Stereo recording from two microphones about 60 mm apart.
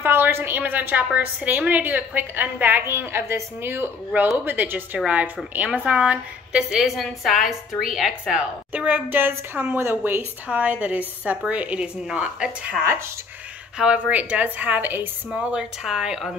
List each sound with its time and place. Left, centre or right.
0.0 s a woman's voice: right
4.9 s a woman's voice: right
8.4 s a woman's voice: right
10.4 s a woman's voice: right
12.8 s speech: right
13.7 s a woman's voice: centre
15.2 s a woman's voice: centre